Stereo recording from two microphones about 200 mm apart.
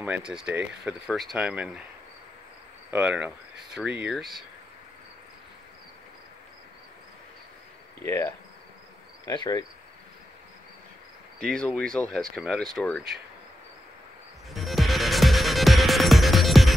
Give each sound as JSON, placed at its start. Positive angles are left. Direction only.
{"t": 0.0, "sound": "speech", "side_deg": -5}
{"t": 2.9, "sound": "speech", "side_deg": -5}
{"t": 8.0, "sound": "speech", "side_deg": 15}
{"t": 9.2, "sound": "cricket", "side_deg": 20}
{"t": 11.3, "sound": "speech", "side_deg": 5}
{"t": 14.5, "sound": "music", "side_deg": 0}